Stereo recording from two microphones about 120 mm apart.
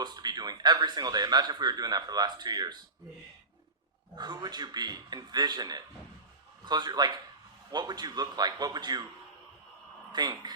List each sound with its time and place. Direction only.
0.0 s speech: 35° right (ahead or behind)
4.1 s speech: 35° right (ahead or behind)
10.1 s speech: 35° right (ahead or behind)